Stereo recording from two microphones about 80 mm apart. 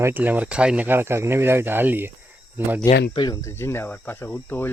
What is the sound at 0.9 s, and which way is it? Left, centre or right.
Speech, right.